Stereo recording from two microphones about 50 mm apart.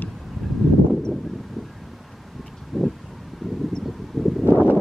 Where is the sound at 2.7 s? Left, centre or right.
Centre.